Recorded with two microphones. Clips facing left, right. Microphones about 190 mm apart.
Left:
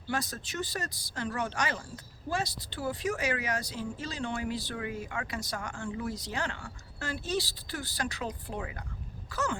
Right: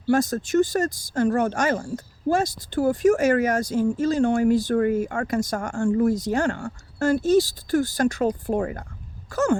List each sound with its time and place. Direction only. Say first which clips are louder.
0.1 s a woman's voice: right 15 dB; 45° right (ahead or behind)